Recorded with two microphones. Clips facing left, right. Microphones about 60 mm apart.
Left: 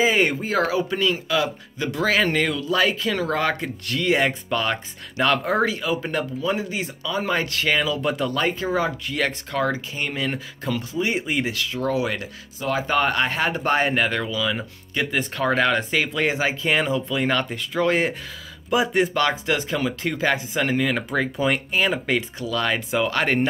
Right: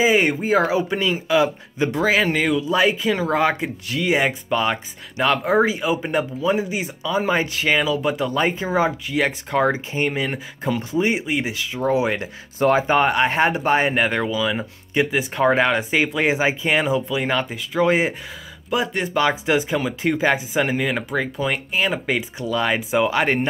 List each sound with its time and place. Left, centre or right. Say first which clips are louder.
0.0 s a man's voice: right 2 dB; centre
2.0 s speech: right 1 dB; centre
8.3 s speech: right 2 dB; centre
9.6 s a man's voice: right 5 dB; right
11.1 s speech: right 1 dB; centre
11.4 s a man's voice: right 2 dB; centre
13.6 s speech: right 2 dB; centre
18.7 s speech: left 3 dB; centre
19.1 s speech: right 3 dB; centre